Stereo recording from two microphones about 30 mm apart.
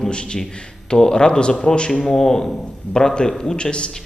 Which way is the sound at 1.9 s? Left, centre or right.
Centre.